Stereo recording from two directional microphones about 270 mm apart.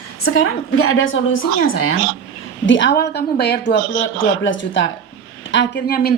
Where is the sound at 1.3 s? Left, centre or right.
Left.